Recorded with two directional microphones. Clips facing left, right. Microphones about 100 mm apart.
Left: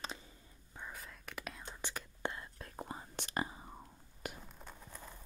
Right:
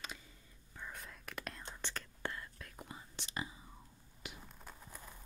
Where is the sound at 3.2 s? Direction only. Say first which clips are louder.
Left 5 dB; 50° left (ahead or behind).